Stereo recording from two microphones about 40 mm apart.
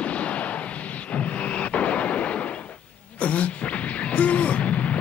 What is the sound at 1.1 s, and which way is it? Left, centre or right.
Artillery fire, left.